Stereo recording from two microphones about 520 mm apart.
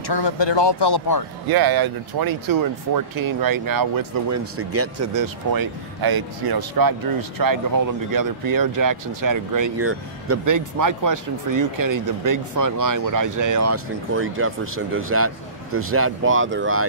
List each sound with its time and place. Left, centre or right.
0.1 s speech: left
1.5 s speech: right
4.6 s speech: right
5.2 s speech: right